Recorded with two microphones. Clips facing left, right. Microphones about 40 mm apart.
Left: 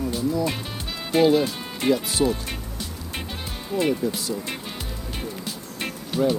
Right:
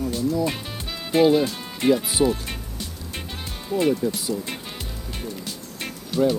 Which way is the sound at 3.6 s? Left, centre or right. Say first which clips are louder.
Right 2 dB; centre.